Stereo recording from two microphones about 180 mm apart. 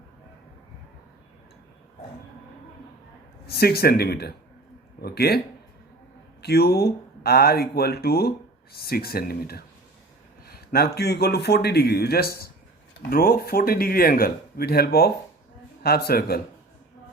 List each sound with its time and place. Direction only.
3.4 s speech: 60° left (ahead or behind)
6.4 s speech: 60° left (ahead or behind)